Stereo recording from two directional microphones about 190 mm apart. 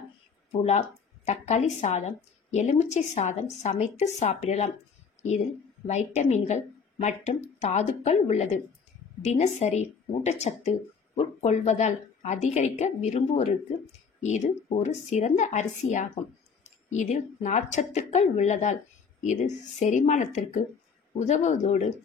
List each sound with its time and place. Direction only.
0.5 s speech: 35° left (ahead or behind)
5.9 s speech: 35° left (ahead or behind)